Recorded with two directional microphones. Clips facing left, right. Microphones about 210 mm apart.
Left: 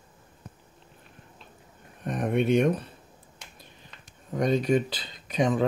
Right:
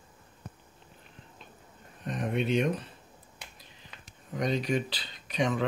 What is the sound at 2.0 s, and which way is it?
Speech, 55° left (ahead or behind).